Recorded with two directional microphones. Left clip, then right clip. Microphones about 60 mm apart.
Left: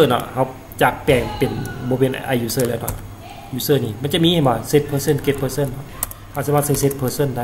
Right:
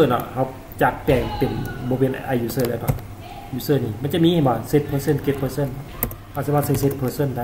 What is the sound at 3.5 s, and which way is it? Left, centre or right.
Speech, centre.